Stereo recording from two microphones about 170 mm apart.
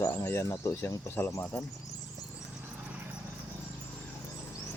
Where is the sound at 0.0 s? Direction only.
15° left (ahead or behind).